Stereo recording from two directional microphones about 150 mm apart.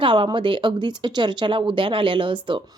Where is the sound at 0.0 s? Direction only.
35° right (ahead or behind).